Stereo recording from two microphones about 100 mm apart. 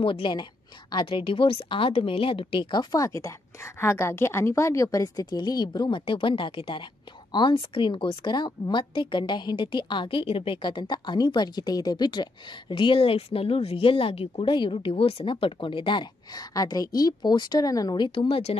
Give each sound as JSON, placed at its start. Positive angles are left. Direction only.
{"t": 0.0, "sound": "a woman's voice", "side_deg": 60}
{"t": 1.0, "sound": "a woman's voice", "side_deg": 60}
{"t": 3.8, "sound": "a woman's voice", "side_deg": 25}